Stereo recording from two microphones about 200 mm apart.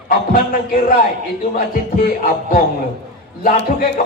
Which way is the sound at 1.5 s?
40° left (ahead or behind).